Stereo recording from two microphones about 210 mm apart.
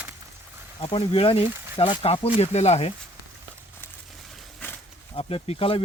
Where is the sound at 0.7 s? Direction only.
25° left (ahead or behind).